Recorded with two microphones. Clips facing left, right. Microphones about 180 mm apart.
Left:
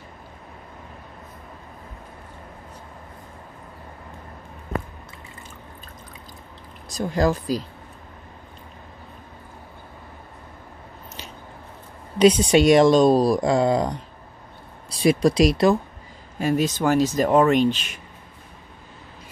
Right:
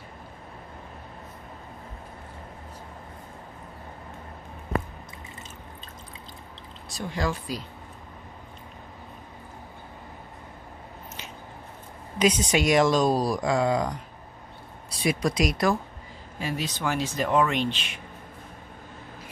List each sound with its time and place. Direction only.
6.9 s speech: 40° left (ahead or behind)
12.2 s speech: 30° left (ahead or behind)
16.3 s speech: 45° left (ahead or behind)